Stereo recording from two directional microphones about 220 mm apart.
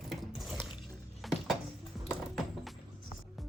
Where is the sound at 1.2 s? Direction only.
Centre (ahead or behind).